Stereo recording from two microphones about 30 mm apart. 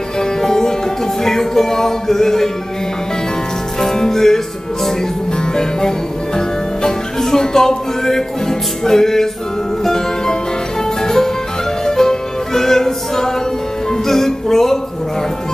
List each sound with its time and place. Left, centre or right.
0.2 s music: centre
3.9 s music: centre
5.6 s music: left